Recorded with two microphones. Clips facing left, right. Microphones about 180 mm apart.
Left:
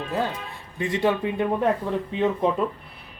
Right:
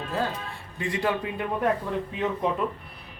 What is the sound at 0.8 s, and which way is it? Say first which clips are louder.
Speech: left 4 dB; 25° left (ahead or behind).